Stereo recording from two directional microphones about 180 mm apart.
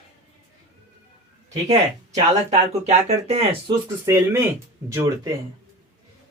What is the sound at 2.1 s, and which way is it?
Speech, 35° right (ahead or behind).